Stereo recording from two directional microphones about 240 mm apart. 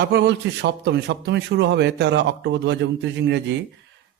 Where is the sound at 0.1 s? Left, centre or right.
Right.